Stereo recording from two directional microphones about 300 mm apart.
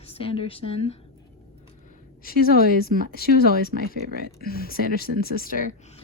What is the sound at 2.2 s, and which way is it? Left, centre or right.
A woman's voice, left.